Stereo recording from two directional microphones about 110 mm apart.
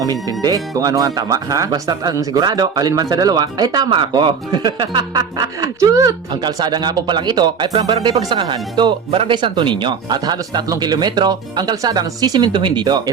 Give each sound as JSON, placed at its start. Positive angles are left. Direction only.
{"t": 0.0, "sound": "speech", "side_deg": -35}
{"t": 6.3, "sound": "speech", "side_deg": -40}